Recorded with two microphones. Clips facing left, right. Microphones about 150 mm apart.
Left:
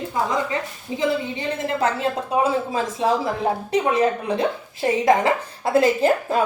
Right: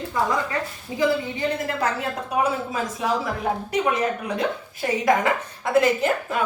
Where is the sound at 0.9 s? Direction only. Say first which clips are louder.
Even; 25° left (ahead or behind).